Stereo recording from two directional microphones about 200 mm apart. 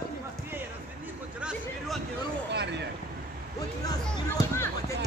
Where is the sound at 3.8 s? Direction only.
15° left (ahead or behind).